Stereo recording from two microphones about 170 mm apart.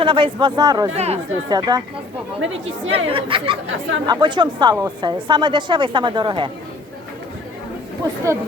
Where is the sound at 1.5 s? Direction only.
25° right (ahead or behind).